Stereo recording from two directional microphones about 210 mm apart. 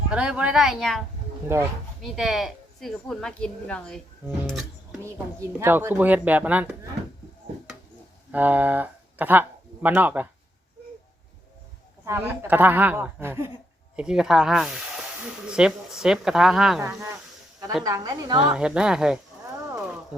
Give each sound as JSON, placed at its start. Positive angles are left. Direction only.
{"t": 0.1, "sound": "a woman's voice", "side_deg": -5}
{"t": 8.3, "sound": "speech", "side_deg": -10}
{"t": 12.0, "sound": "a woman's voice", "side_deg": -15}
{"t": 16.8, "sound": "a woman's voice", "side_deg": -15}
{"t": 18.5, "sound": "speech", "side_deg": -5}
{"t": 19.7, "sound": "horse", "side_deg": -5}